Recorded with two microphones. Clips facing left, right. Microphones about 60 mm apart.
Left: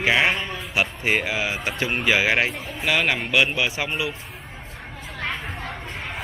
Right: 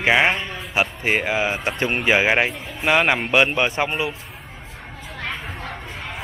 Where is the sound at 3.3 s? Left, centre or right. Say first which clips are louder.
Right 3 dB; right.